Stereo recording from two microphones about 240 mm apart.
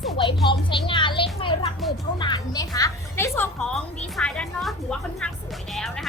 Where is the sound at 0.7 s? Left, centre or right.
Centre.